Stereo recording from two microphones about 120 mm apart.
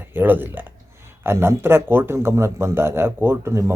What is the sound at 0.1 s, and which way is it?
A man's voice, 15° right (ahead or behind).